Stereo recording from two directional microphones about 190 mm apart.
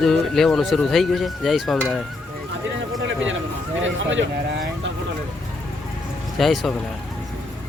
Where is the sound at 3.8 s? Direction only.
80° right.